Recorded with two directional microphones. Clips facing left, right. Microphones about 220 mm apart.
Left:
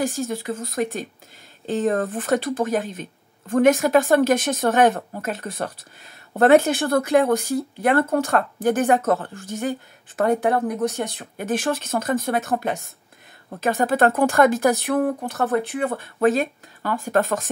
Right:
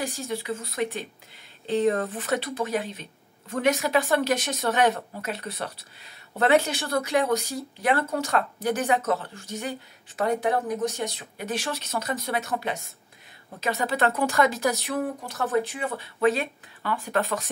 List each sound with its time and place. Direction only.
0.0 s speech: 45° left (ahead or behind)